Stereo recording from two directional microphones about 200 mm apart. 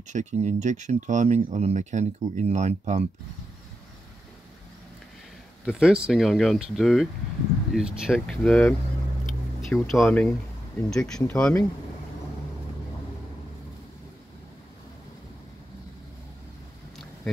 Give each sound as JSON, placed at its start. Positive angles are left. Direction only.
{"t": 0.1, "sound": "speech", "side_deg": -35}
{"t": 5.7, "sound": "speech", "side_deg": -5}